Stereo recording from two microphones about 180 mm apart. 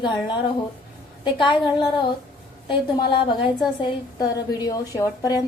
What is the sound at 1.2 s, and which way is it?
Speech, 25° left (ahead or behind).